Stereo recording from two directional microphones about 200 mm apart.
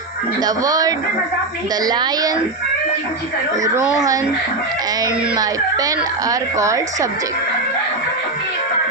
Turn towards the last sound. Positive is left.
turn(degrees=-15)  # may be behind; listen again after turning